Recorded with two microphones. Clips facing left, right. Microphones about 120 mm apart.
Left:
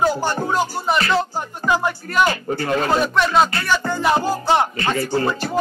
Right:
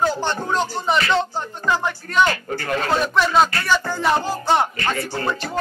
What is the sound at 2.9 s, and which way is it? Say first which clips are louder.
Music: right 1 dB; centre (ahead or behind).